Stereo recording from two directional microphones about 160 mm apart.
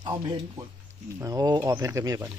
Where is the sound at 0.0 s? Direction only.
25° right (ahead or behind).